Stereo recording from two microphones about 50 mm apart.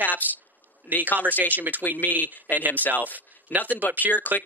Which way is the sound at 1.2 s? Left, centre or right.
Right.